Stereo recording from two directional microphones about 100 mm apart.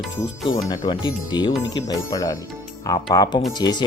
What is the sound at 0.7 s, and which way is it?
Speech, 50° left (ahead or behind).